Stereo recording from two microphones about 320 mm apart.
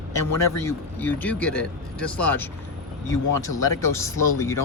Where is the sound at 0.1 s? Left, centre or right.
Centre.